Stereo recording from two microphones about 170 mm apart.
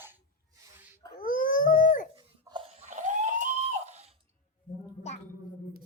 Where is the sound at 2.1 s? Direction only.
25° right (ahead or behind).